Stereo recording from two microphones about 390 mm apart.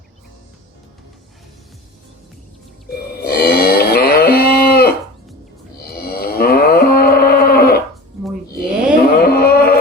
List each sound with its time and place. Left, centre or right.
3.2 s moo: left
5.8 s livestock: left
9.0 s a sound: left